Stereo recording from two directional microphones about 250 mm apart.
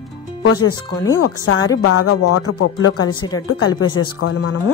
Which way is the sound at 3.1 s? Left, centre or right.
Centre.